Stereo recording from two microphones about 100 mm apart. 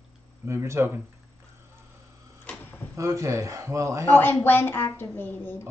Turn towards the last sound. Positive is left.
turn(degrees=20)  # may be behind; listen again after turning